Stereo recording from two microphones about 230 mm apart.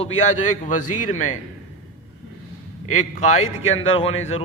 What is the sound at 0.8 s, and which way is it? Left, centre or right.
Speech, left.